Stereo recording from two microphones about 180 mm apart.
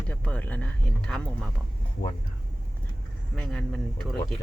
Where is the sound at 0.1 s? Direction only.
10° left (ahead or behind).